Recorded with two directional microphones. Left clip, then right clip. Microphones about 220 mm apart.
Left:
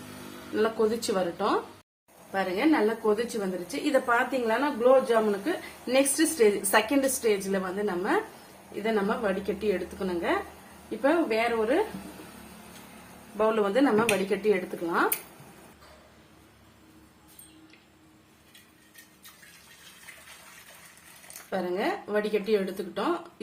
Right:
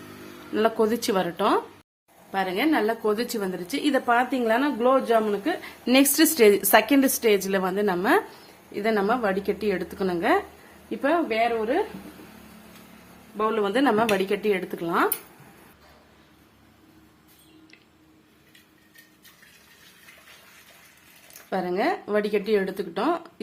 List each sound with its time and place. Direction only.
0.5 s a woman's voice: 40° right (ahead or behind)
11.0 s a woman's voice: 35° right (ahead or behind)
13.3 s a woman's voice: 35° right (ahead or behind)
21.5 s speech: 50° right (ahead or behind)